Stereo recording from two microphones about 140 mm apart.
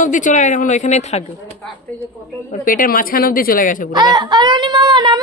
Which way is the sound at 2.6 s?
90° left.